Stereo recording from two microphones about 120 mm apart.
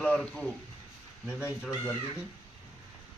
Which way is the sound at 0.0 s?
10° left (ahead or behind).